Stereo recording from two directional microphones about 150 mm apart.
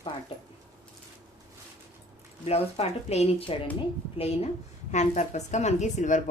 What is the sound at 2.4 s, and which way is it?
A woman's voice, 45° left (ahead or behind).